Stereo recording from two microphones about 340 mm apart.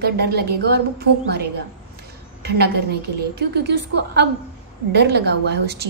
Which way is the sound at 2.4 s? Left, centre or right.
Right.